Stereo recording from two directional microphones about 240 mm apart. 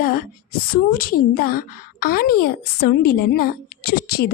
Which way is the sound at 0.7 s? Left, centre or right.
Left.